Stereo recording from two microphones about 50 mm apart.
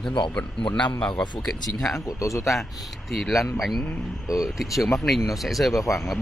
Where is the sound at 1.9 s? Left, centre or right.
Left.